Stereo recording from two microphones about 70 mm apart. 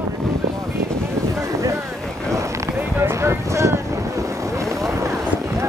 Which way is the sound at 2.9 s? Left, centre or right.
Right.